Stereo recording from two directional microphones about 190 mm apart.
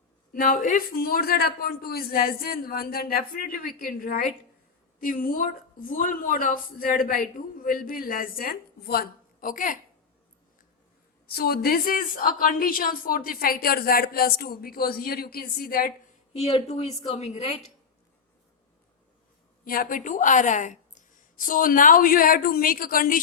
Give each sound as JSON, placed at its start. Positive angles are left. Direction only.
{"t": 0.3, "sound": "a woman's voice", "side_deg": 50}
{"t": 11.3, "sound": "a woman's voice", "side_deg": 55}
{"t": 16.4, "sound": "a woman's voice", "side_deg": 35}
{"t": 19.6, "sound": "a woman's voice", "side_deg": 50}